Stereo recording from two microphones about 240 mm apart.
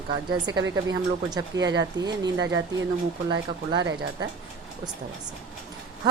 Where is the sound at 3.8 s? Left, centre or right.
Right.